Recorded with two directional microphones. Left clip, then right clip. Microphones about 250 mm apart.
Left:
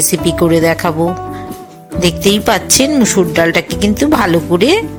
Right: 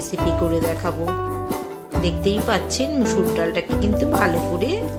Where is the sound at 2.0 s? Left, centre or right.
Left.